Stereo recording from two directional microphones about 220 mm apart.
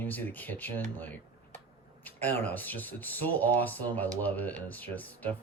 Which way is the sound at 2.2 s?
10° left (ahead or behind).